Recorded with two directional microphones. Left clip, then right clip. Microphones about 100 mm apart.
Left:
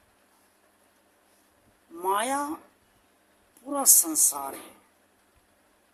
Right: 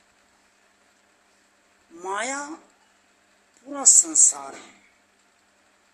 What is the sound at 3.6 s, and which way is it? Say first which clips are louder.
Speech: right 4 dB; 40° left (ahead or behind).